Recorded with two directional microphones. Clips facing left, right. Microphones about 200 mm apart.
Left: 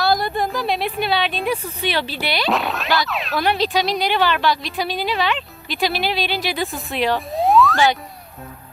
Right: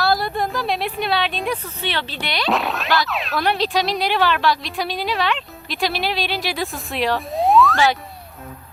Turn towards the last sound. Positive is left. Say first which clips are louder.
# even
turn(degrees=0)  # may be behind; listen again after turning